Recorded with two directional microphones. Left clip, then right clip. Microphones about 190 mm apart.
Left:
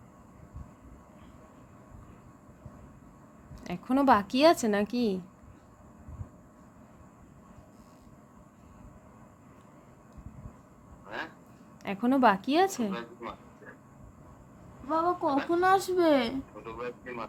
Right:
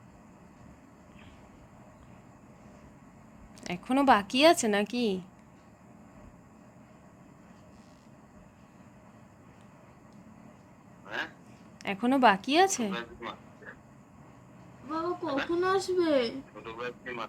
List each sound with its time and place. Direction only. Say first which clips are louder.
3.6 s speech: even; centre (ahead or behind)
11.0 s a sound: right 3 dB; 5° left (ahead or behind)
11.8 s a woman's voice: right 1 dB; centre (ahead or behind)
14.9 s a woman's voice: left 4 dB; 45° left (ahead or behind)
16.6 s speech: even; 5° left (ahead or behind)